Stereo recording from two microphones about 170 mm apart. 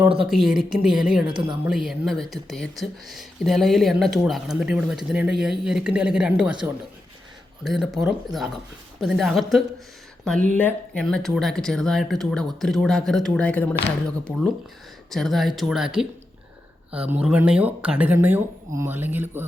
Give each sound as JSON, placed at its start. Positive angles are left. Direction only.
{"t": 0.3, "sound": "speech", "side_deg": 0}
{"t": 1.3, "sound": "speech", "side_deg": -30}
{"t": 1.6, "sound": "speech", "side_deg": 0}